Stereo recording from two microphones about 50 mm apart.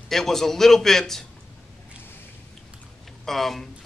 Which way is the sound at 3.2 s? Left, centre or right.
Centre.